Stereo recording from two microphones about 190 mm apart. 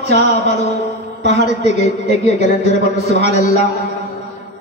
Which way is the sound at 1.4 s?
40° left (ahead or behind).